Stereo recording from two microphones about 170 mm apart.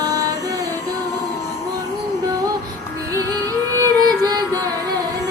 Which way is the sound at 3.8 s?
20° right (ahead or behind).